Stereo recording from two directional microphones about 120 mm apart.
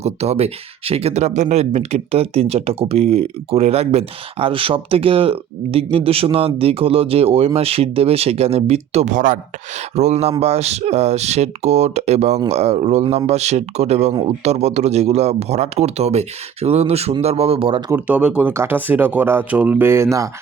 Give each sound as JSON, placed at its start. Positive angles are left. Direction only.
{"t": 0.0, "sound": "speech", "side_deg": -60}
{"t": 9.9, "sound": "speech", "side_deg": -70}
{"t": 18.1, "sound": "speech", "side_deg": -10}
{"t": 18.5, "sound": "speech", "side_deg": -20}